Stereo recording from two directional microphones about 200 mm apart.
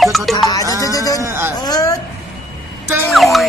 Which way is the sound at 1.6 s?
20° left (ahead or behind).